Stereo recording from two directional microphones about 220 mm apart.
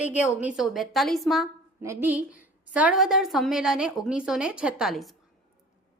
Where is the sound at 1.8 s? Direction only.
10° right (ahead or behind).